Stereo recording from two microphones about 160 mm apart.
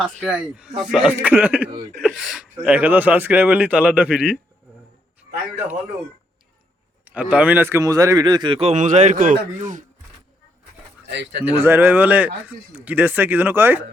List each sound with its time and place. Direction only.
0.0 s speech: 5° right (ahead or behind)
7.0 s a man's voice: 10° right (ahead or behind); by 9.8 s 50° right (ahead or behind)
11.0 s speech: 90° right
11.6 s speech: 15° right (ahead or behind)